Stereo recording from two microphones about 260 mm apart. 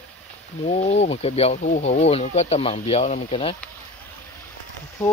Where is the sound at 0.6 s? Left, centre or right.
Left.